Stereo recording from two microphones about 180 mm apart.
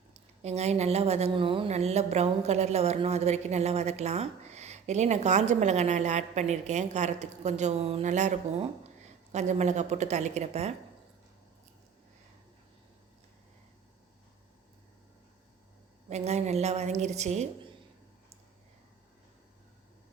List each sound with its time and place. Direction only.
0.4 s a woman's voice: 35° right (ahead or behind)
16.0 s a woman's voice: 35° right (ahead or behind)